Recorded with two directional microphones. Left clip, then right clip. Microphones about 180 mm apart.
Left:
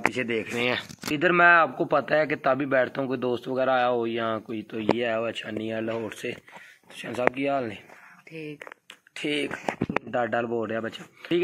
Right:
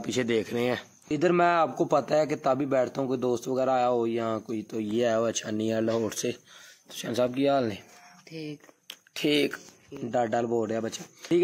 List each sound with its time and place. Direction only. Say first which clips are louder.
0.1 s speech: right 1 dB; 35° right (ahead or behind)
0.7 s a man's voice: left 3 dB; 20° right (ahead or behind)
4.9 s speech: right 5 dB; 55° right (ahead or behind)
8.3 s speech: left 1 dB; 25° right (ahead or behind)
9.1 s speech: right 3 dB; 90° right
10.1 s speech: right 2 dB; 25° right (ahead or behind)